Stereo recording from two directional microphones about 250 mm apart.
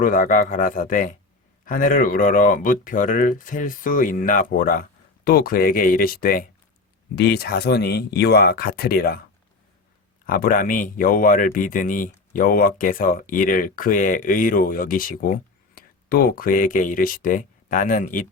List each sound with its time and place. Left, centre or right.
0.0 s speech: left
10.2 s speech: left